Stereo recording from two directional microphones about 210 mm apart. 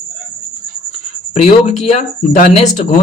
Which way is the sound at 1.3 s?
35° left (ahead or behind).